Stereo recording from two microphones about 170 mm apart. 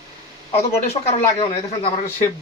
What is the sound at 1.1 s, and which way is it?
Speech, 35° left (ahead or behind).